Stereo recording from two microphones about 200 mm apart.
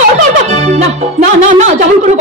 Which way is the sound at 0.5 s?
35° right (ahead or behind).